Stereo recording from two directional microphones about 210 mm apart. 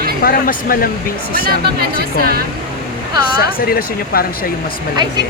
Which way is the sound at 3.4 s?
45° left (ahead or behind).